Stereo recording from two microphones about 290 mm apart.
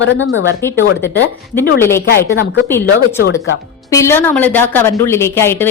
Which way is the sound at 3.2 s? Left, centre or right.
Left.